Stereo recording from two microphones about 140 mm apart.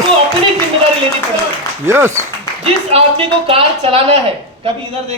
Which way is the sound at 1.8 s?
20° right (ahead or behind).